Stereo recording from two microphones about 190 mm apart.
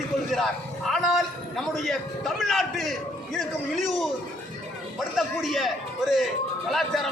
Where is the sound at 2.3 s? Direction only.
Centre (ahead or behind).